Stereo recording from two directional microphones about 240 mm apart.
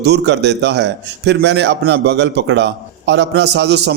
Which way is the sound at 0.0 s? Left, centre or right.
Right.